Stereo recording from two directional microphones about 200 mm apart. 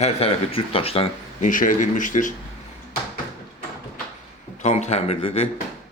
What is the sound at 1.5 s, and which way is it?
Speech, 40° left (ahead or behind).